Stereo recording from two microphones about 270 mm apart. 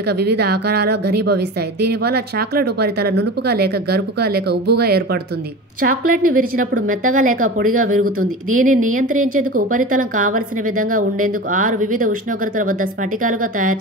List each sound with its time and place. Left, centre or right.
0.0 s a woman's voice: right
8.0 s speech: right
8.5 s a woman's voice: right